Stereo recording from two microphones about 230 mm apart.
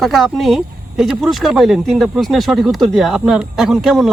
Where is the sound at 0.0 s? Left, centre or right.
Centre.